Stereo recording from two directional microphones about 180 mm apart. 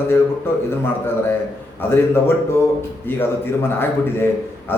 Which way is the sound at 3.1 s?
10° left (ahead or behind).